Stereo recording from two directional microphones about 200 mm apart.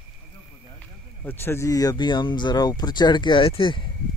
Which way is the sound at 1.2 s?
10° left (ahead or behind).